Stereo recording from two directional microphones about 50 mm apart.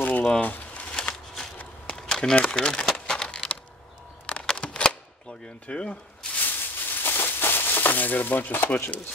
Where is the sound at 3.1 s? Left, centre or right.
Centre.